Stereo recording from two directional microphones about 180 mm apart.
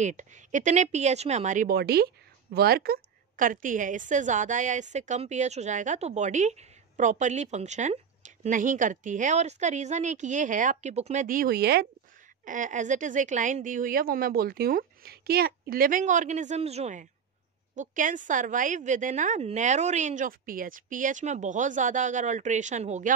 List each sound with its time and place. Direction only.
0.0 s a woman's voice: 40° right (ahead or behind)
1.8 s a woman's voice: 60° right (ahead or behind)
12.4 s a woman's voice: 45° right (ahead or behind)